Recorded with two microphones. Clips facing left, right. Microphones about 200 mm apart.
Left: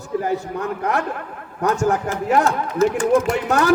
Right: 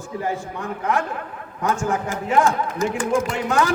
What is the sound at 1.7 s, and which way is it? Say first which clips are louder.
A man's voice: left 3 dB; 40° left (ahead or behind).